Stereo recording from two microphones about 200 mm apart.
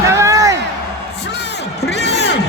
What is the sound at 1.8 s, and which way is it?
Crowd, 60° left (ahead or behind).